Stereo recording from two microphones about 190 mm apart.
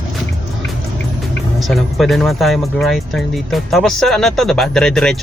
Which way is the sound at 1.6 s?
Centre (ahead or behind).